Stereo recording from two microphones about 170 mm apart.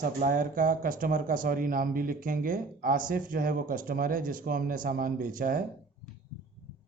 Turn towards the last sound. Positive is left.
turn(degrees=-55)  # may be behind; listen again after turning